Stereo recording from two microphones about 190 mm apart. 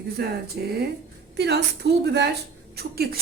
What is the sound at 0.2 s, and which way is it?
Speech, 55° right (ahead or behind).